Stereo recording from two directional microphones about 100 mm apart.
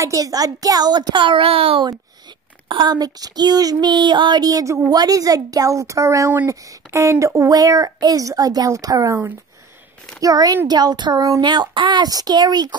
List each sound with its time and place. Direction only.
0.0 s a child's voice: 35° right (ahead or behind); by 1.8 s 70° right (ahead or behind)
1.8 s a woman's voice: 50° right (ahead or behind)
10.2 s a woman's voice: 40° right (ahead or behind)
11.4 s a child's voice: 50° right (ahead or behind)